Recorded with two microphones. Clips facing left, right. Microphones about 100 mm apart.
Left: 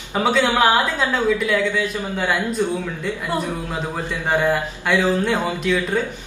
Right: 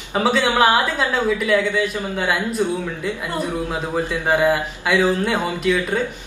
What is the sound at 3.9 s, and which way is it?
A man's voice, 15° right (ahead or behind).